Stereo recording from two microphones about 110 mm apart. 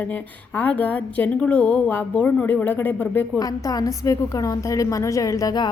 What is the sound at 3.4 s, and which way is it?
A woman's voice, 35° left (ahead or behind).